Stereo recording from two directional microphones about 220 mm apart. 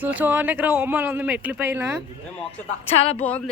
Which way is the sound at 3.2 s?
5° left (ahead or behind).